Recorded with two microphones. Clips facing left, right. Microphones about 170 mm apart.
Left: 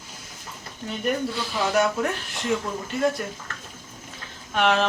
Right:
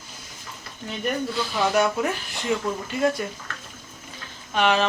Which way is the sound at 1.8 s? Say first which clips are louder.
Even; centre (ahead or behind).